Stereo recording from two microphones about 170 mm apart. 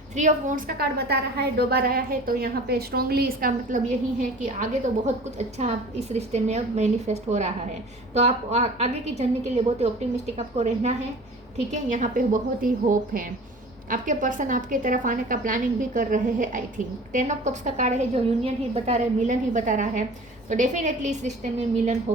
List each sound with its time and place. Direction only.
0.2 s a woman's voice: 45° right (ahead or behind)